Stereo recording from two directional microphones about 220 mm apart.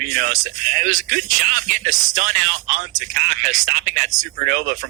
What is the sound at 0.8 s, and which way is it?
A man's voice, 35° right (ahead or behind).